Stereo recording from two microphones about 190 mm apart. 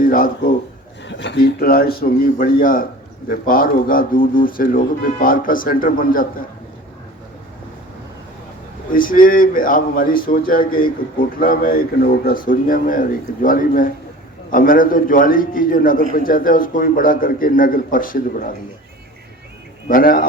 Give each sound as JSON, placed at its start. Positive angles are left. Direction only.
{"t": 0.0, "sound": "a man's voice", "side_deg": 45}
{"t": 1.0, "sound": "speech", "side_deg": 65}
{"t": 8.9, "sound": "speech", "side_deg": 45}
{"t": 19.9, "sound": "speech", "side_deg": 45}